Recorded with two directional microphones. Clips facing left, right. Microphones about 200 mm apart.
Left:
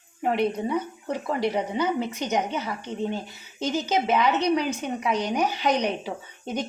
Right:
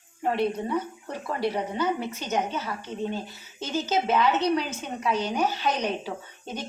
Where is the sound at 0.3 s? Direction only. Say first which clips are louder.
Left 2 dB; 15° left (ahead or behind).